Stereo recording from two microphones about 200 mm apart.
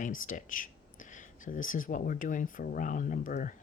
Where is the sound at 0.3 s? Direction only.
40° left (ahead or behind).